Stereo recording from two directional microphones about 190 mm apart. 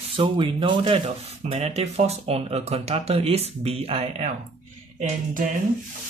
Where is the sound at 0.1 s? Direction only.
30° right (ahead or behind).